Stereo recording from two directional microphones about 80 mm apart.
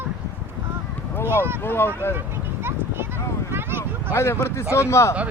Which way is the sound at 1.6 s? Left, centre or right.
Left.